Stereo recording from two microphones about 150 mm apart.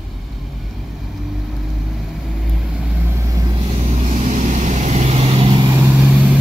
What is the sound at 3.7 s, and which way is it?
Vehicle, 40° right (ahead or behind).